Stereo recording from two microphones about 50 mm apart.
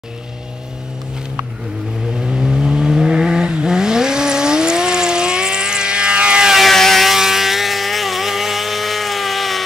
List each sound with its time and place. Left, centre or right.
2.1 s vehicle: centre
6.7 s vehicle: centre